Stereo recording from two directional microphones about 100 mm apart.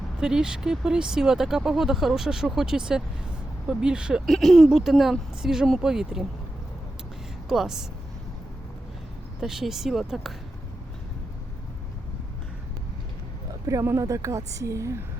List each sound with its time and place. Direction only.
0.2 s speech: 5° right (ahead or behind)
4.3 s speech: centre (ahead or behind)
7.4 s speech: 5° right (ahead or behind)
9.4 s speech: 5° right (ahead or behind)
13.7 s speech: 30° right (ahead or behind)